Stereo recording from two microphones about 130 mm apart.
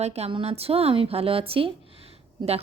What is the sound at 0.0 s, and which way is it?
Speech, 55° right (ahead or behind).